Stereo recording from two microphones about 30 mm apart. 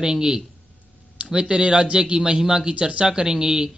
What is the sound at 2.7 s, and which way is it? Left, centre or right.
Speech, right.